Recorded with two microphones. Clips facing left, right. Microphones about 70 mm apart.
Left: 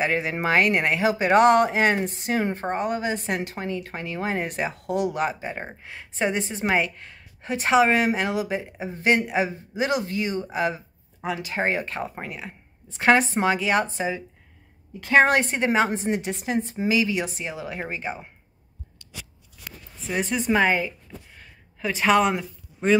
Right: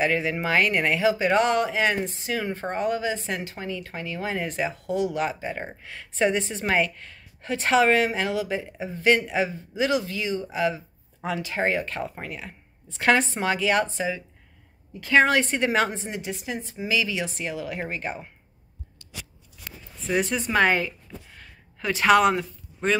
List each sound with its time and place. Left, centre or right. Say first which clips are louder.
0.0 s speech: even; left; by 18.3 s centre
20.1 s speech: left 1 dB; centre